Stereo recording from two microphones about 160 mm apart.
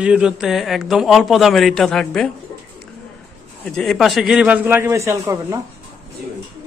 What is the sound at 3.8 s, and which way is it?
Speech, centre (ahead or behind).